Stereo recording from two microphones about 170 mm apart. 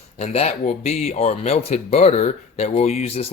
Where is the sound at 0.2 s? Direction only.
40° left (ahead or behind).